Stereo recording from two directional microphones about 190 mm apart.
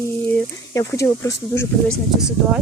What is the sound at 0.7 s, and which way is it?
Speech, 15° left (ahead or behind).